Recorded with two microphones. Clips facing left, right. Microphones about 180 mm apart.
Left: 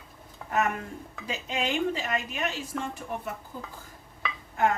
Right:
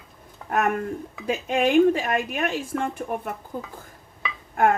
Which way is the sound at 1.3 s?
55° right (ahead or behind).